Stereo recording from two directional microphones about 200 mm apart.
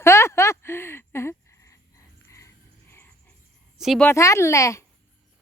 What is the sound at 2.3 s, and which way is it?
Frog, 15° left (ahead or behind).